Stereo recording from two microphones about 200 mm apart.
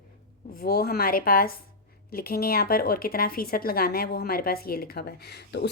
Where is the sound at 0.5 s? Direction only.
50° left (ahead or behind).